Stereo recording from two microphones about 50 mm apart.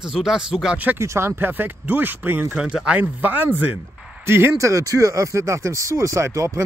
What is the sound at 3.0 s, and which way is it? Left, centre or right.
Speech, right.